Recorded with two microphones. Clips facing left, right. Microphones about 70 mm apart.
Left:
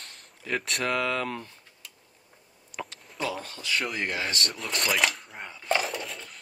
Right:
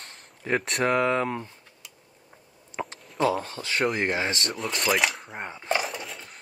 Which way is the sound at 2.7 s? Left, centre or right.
Right.